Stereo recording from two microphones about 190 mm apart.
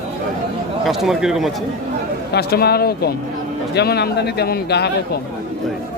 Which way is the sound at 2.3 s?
55° left (ahead or behind).